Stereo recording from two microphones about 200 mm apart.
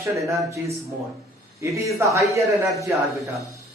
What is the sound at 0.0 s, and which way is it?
Speech, 15° right (ahead or behind).